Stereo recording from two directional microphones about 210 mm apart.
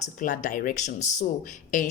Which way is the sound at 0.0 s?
35° left (ahead or behind).